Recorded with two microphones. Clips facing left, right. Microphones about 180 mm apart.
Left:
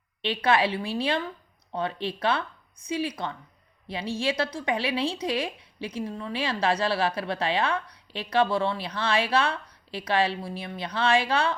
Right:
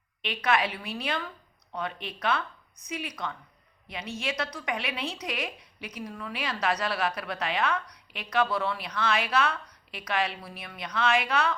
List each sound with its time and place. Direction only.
0.2 s a woman's voice: 30° left (ahead or behind)